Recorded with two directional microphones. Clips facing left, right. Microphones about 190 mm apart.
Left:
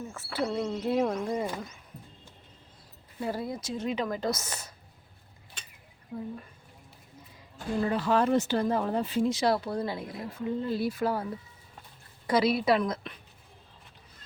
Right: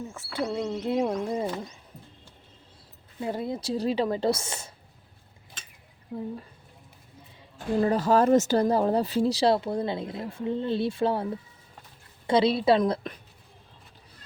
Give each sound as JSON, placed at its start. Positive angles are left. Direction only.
{"t": 0.1, "sound": "speech", "side_deg": -15}
{"t": 1.3, "sound": "speech", "side_deg": -30}
{"t": 3.2, "sound": "speech", "side_deg": -20}
{"t": 6.1, "sound": "speech", "side_deg": -25}
{"t": 7.8, "sound": "speech", "side_deg": -40}
{"t": 12.3, "sound": "speech", "side_deg": -25}